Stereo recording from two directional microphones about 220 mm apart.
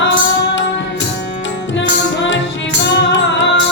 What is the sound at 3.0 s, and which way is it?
Music, 55° left (ahead or behind).